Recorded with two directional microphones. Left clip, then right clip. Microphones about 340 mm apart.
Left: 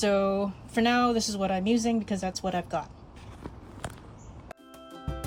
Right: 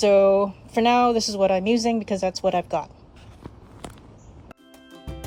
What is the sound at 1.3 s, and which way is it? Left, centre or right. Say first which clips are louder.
Speech: right 8 dB; centre.